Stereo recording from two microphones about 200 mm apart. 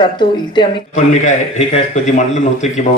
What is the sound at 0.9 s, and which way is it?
Speech, 35° left (ahead or behind).